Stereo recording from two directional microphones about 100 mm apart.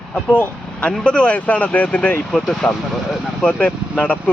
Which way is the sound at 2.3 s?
5° left (ahead or behind).